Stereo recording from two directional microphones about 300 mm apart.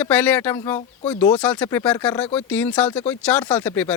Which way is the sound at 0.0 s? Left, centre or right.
Centre.